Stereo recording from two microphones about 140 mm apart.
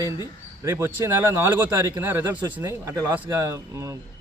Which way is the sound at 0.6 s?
20° right (ahead or behind).